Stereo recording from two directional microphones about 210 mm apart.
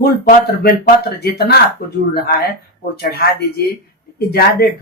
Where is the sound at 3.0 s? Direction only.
45° left (ahead or behind).